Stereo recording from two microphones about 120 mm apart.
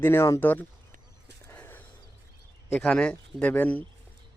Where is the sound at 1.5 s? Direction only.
15° left (ahead or behind).